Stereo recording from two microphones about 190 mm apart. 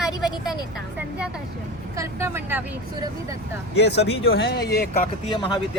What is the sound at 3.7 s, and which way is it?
Speech, 60° left (ahead or behind).